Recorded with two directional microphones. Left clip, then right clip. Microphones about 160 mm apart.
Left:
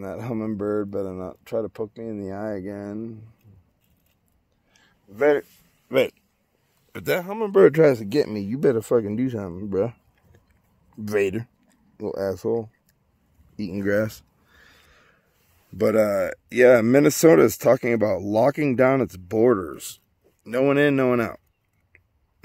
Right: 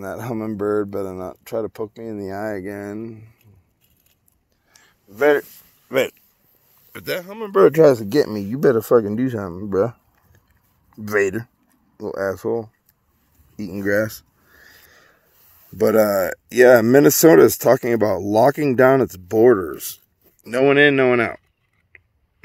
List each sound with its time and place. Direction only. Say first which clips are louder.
0.0 s speech: right 3 dB; centre (ahead or behind)
3.0 s speech: right 2 dB; centre (ahead or behind)
4.7 s a sound: right 2 dB; 10° right (ahead or behind)
5.2 s speech: right 3 dB; 30° right (ahead or behind)
5.9 s speech: right 1 dB; 30° left (ahead or behind)
7.7 s speech: right 4 dB; centre (ahead or behind)
8.1 s speech: right 4 dB; 20° right (ahead or behind)
10.9 s speech: right 4 dB; 5° left (ahead or behind)
14.5 s a sound: right 5 dB; 5° left (ahead or behind)
14.9 s a sound: right 5 dB; 20° right (ahead or behind)
15.8 s speech: right 4 dB; 25° right (ahead or behind)
16.8 s speech: right 4 dB; 10° right (ahead or behind)
20.6 s speech: right 6 dB; 10° left (ahead or behind)